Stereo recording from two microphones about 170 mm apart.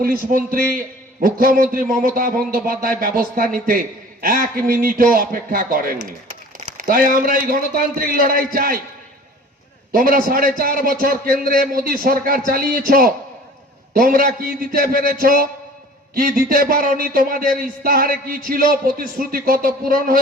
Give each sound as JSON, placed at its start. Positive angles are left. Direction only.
{"t": 0.0, "sound": "a man's voice", "side_deg": -55}
{"t": 9.9, "sound": "a man's voice", "side_deg": -55}